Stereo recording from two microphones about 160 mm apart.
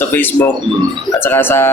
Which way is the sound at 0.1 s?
15° left (ahead or behind).